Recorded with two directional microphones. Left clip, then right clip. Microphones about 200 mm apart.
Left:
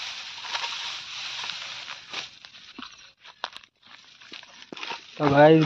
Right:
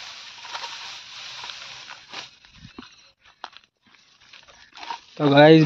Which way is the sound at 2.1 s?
5° right (ahead or behind).